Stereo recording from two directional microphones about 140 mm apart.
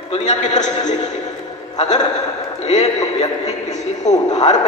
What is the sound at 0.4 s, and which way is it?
Speech, 60° left (ahead or behind).